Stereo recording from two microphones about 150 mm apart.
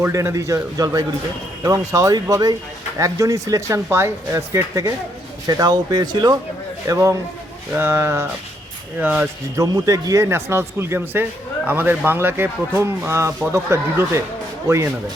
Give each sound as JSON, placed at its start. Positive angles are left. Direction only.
{"t": 0.0, "sound": "speech", "side_deg": -15}